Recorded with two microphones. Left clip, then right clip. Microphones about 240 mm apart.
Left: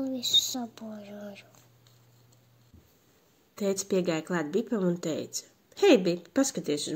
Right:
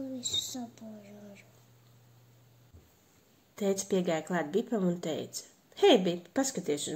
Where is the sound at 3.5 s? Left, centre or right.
Left.